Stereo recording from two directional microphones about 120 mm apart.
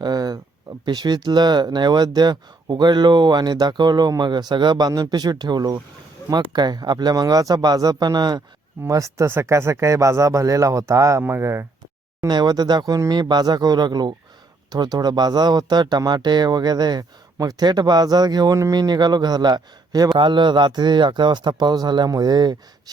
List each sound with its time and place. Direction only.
0.0 s a sound: 35° right (ahead or behind)
0.9 s speech: 35° right (ahead or behind); by 11.6 s 20° right (ahead or behind)
12.3 s speech: 35° right (ahead or behind)